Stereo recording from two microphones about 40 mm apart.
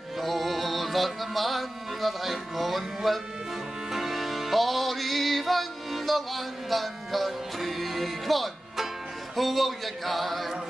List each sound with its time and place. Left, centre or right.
0.2 s music: centre
9.4 s speech: centre